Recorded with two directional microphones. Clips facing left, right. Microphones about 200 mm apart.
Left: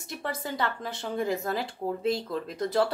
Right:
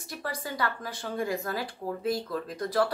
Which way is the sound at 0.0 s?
25° left (ahead or behind).